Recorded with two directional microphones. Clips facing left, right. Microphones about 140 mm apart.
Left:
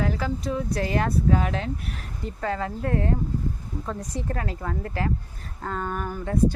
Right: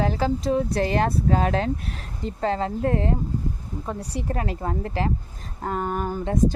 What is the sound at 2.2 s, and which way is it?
Speech, 25° right (ahead or behind).